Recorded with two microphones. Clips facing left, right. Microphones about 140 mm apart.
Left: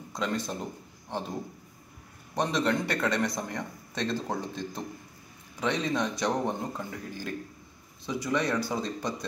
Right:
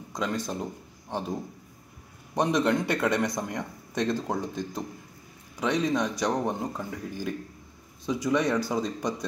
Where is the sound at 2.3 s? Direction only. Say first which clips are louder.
Right 3 dB; 20° right (ahead or behind).